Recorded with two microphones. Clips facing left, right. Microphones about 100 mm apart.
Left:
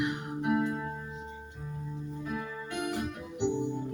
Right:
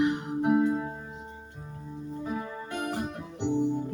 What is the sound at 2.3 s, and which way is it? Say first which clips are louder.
Keyboard: right 2 dB; 35° right (ahead or behind).